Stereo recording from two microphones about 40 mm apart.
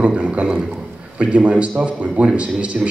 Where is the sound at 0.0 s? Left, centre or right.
Right.